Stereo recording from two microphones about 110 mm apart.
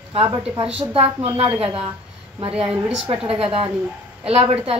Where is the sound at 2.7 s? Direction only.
5° right (ahead or behind).